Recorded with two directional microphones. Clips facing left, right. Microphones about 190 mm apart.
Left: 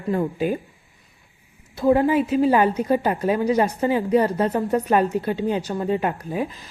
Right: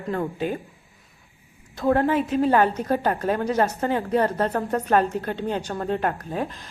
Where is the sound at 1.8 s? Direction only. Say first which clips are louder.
Left 3 dB; 10° left (ahead or behind).